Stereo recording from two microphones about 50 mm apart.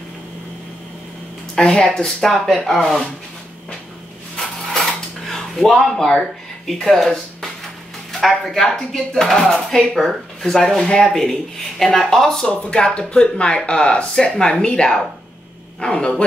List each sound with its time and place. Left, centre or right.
1.6 s speech: left
2.2 s speech: centre
5.3 s speech: centre
12.4 s speech: centre